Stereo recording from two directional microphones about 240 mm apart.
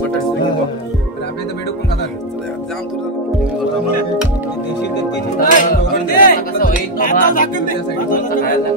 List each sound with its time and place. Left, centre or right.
5.4 s music: left